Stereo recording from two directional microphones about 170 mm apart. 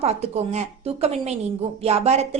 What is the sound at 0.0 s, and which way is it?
A woman's voice, 40° right (ahead or behind).